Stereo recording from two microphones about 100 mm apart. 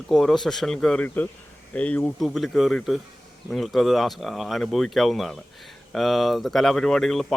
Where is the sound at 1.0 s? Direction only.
20° left (ahead or behind).